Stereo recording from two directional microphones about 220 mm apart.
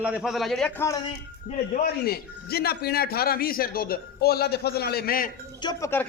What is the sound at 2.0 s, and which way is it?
A man's voice, 45° left (ahead or behind).